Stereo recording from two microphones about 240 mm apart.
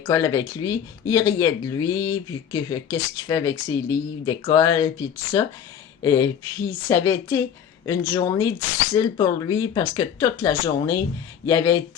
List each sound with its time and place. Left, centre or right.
0.0 s speech: centre